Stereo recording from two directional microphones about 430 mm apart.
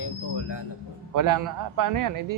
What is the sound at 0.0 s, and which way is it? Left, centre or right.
Music, left.